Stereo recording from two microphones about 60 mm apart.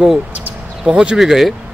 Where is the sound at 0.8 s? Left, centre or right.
Centre.